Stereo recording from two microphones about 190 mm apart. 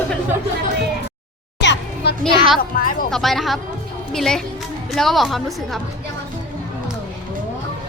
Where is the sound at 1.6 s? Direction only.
65° left (ahead or behind).